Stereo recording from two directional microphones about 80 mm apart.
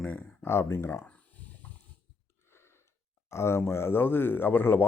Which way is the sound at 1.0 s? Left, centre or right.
Centre.